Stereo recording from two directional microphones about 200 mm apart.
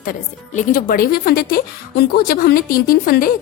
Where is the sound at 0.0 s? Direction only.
45° left (ahead or behind).